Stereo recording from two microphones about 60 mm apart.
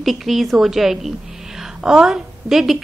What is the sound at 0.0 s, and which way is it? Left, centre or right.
A woman's voice, centre.